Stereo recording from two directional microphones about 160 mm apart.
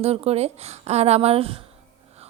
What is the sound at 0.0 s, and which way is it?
A woman's voice, 40° right (ahead or behind).